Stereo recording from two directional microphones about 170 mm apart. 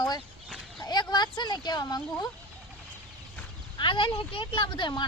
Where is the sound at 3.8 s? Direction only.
30° left (ahead or behind).